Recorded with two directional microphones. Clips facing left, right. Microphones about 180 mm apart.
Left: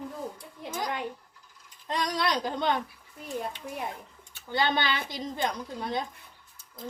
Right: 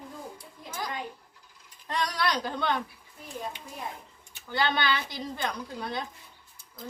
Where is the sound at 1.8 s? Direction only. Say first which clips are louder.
Left 1 dB; 20° left (ahead or behind).